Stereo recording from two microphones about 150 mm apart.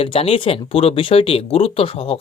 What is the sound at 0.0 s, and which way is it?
Speech, 40° left (ahead or behind).